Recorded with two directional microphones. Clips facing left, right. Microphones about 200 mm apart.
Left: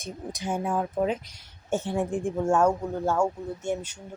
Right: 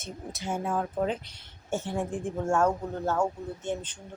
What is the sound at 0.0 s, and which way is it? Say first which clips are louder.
Speech: left 3 dB; 15° left (ahead or behind).